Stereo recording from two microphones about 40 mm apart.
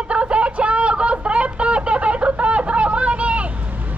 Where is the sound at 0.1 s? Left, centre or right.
Right.